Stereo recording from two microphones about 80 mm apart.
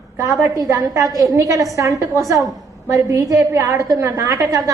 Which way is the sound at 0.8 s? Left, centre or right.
Right.